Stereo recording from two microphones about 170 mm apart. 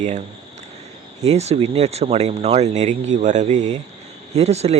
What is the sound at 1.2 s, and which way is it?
Speech, 40° right (ahead or behind).